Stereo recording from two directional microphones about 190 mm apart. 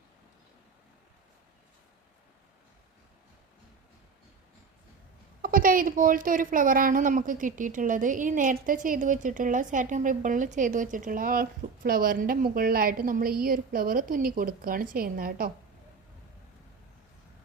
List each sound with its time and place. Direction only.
5.4 s a woman's voice: 50° right (ahead or behind)